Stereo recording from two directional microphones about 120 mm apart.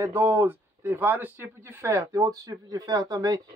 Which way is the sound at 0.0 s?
20° right (ahead or behind).